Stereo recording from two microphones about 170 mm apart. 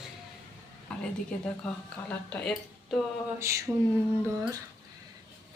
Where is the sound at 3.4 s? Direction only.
15° right (ahead or behind).